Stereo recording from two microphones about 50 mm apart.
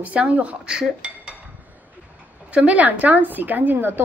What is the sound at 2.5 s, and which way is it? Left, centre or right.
A woman's voice, right.